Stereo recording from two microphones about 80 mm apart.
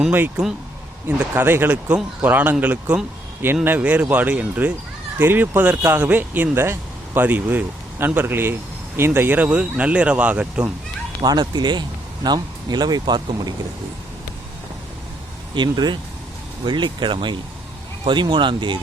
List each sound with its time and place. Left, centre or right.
1.4 s speech: right
11.2 s speech: right
15.5 s speech: right
16.6 s speech: right